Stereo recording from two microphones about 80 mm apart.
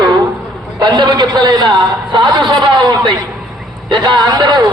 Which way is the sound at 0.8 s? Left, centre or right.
Right.